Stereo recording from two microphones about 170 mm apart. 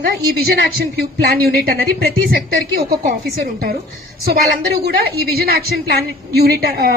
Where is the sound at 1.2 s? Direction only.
65° right (ahead or behind).